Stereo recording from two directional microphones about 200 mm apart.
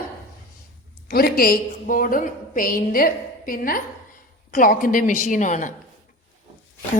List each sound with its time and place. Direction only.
1.0 s a woman's voice: 50° left (ahead or behind)